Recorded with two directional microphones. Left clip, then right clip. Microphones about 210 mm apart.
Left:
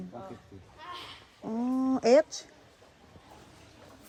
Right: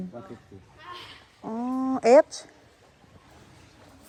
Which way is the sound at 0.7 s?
50° left (ahead or behind).